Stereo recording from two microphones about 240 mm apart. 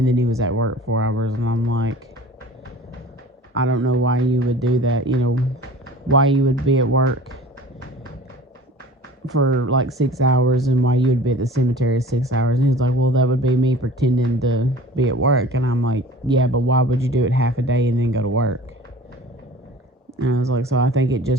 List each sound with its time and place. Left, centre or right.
0.0 s speech: right
3.5 s speech: right
9.4 s speech: right
20.2 s speech: right